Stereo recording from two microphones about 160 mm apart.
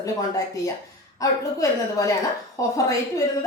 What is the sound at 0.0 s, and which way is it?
Speech, 20° left (ahead or behind).